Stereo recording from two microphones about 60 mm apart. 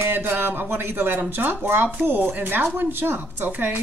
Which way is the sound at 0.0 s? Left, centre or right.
Right.